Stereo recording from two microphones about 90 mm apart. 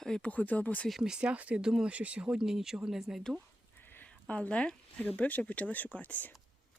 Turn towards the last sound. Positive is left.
turn(degrees=15)  # may be behind; listen again after turning